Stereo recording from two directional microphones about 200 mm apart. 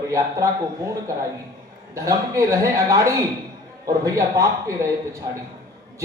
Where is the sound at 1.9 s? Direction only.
15° right (ahead or behind).